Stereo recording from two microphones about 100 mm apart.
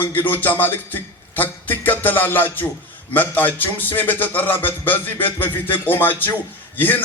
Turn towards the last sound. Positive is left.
turn(degrees=20)  # may be behind; listen again after turning